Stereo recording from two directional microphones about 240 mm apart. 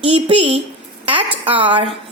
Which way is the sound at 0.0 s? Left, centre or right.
Right.